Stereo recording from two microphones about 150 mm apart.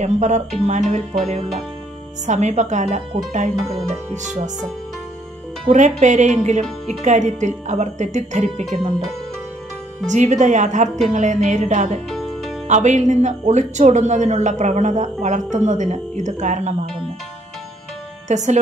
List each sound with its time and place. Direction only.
0.0 s speech: 50° right (ahead or behind)
5.7 s speech: 50° right (ahead or behind)
8.6 s speech: centre (ahead or behind)
10.0 s speech: 50° right (ahead or behind)
12.1 s music: centre (ahead or behind)
12.6 s speech: 50° right (ahead or behind)
18.3 s speech: 50° right (ahead or behind)